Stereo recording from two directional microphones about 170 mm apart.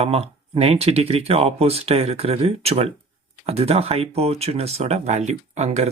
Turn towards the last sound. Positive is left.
turn(degrees=-40)  # may be behind; listen again after turning